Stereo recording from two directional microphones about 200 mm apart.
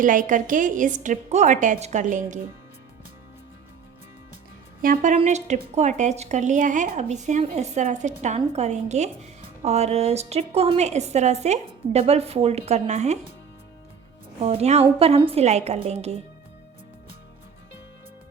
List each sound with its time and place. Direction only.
0.0 s a woman's voice: 40° right (ahead or behind)
4.8 s a woman's voice: 40° right (ahead or behind)
14.4 s a woman's voice: 30° right (ahead or behind)